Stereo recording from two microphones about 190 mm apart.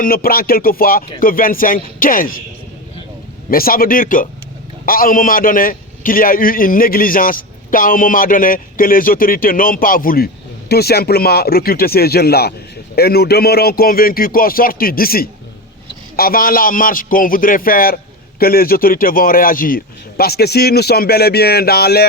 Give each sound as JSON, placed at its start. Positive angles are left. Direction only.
{"t": 0.0, "sound": "a man's voice", "side_deg": 50}
{"t": 3.5, "sound": "a man's voice", "side_deg": 50}